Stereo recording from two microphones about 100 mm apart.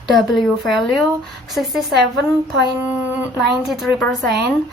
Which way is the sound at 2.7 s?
15° right (ahead or behind).